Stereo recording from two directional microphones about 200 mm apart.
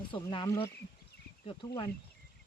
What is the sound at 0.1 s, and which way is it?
Speech, 25° left (ahead or behind).